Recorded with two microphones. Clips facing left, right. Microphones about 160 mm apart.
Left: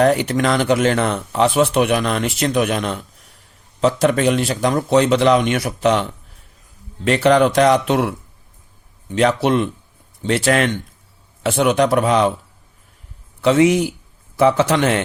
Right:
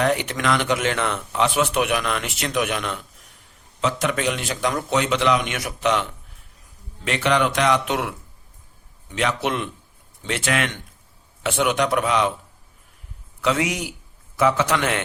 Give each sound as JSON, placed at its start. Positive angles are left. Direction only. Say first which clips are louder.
{"t": 0.0, "sound": "speech", "louder": "left 6 dB", "side_deg": 35}
{"t": 9.1, "sound": "speech", "louder": "left 8 dB", "side_deg": 35}
{"t": 13.4, "sound": "a man's voice", "louder": "left 9 dB", "side_deg": 30}